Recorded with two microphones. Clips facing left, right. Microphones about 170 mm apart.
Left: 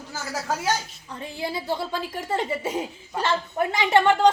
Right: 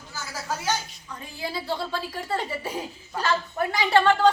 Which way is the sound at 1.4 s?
20° left (ahead or behind).